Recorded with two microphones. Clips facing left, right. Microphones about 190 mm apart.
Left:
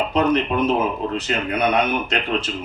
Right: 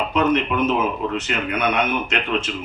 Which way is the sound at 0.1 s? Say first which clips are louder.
Right 1 dB; 35° left (ahead or behind).